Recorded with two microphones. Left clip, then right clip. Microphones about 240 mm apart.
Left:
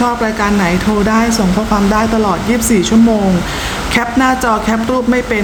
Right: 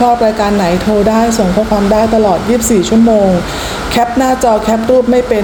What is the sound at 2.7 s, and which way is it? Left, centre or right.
Speech, centre.